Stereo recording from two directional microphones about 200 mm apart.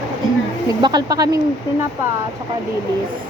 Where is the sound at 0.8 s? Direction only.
20° right (ahead or behind).